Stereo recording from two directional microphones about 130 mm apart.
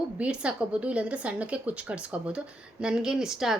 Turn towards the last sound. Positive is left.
turn(degrees=-5)  # may be behind; listen again after turning